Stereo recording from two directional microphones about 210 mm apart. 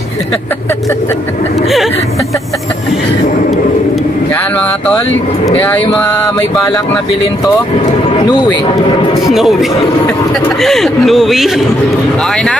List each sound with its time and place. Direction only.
4.3 s speech: 5° left (ahead or behind)
5.8 s a sound: 15° left (ahead or behind)
9.3 s speech: centre (ahead or behind)